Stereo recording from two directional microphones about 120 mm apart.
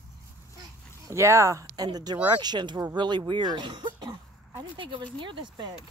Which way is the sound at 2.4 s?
40° right (ahead or behind).